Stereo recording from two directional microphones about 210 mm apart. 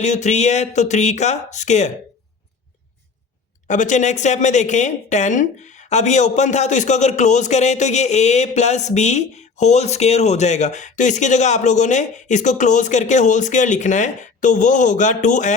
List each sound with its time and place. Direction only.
0.0 s a woman's voice: 35° left (ahead or behind)
3.7 s a woman's voice: 35° left (ahead or behind)